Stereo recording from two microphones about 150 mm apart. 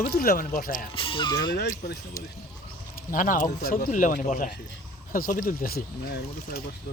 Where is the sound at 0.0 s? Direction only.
90° left; by 0.9 s 65° left (ahead or behind).